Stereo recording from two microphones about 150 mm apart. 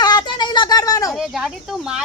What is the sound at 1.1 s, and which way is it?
Speech, 5° right (ahead or behind).